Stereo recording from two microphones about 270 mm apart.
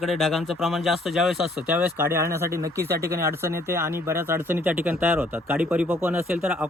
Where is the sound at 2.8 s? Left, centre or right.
Right.